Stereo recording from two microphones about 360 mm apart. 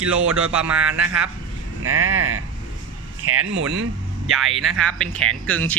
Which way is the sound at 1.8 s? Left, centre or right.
Right.